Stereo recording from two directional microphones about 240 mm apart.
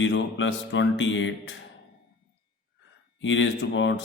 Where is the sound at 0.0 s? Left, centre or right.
Left.